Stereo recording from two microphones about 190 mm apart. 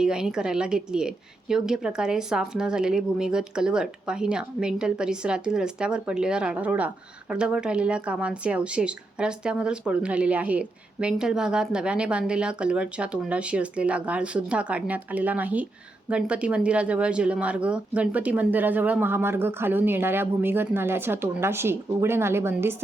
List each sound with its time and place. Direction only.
0.0 s a woman's voice: 5° right (ahead or behind)